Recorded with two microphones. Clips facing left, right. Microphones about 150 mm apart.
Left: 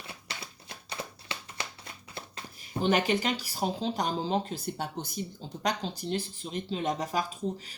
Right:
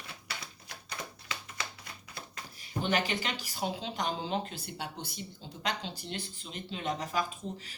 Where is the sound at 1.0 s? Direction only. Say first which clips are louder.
Left 4 dB; 30° left (ahead or behind).